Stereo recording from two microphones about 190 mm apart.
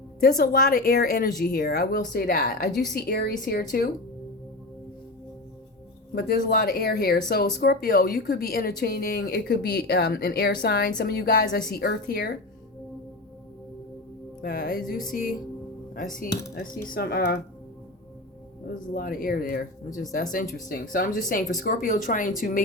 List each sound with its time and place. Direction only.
0.2 s a woman's voice: 50° left (ahead or behind)
1.6 s a woman's voice: 55° left (ahead or behind)
6.1 s a woman's voice: 50° left (ahead or behind)
14.4 s a woman's voice: 55° left (ahead or behind)
18.9 s a woman's voice: 50° left (ahead or behind)